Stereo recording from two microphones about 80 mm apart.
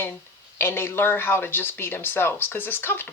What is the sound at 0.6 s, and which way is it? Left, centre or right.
Speech, left.